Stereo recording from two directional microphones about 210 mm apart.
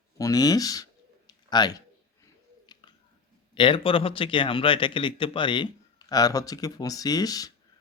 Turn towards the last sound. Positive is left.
turn(degrees=15)  # may be behind; listen again after turning